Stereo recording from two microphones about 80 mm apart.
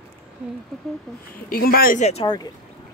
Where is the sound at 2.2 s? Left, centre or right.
Left.